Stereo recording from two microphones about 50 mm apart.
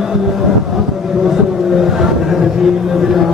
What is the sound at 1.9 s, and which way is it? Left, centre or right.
Vehicle, centre.